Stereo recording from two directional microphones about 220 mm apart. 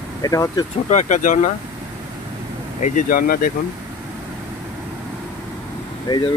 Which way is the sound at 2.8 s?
40° left (ahead or behind).